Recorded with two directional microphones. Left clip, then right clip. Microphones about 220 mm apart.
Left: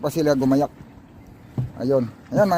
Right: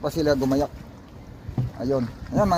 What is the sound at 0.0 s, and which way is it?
Speech, 40° left (ahead or behind).